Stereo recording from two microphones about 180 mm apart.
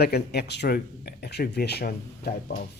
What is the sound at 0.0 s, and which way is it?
Speech, 65° left (ahead or behind).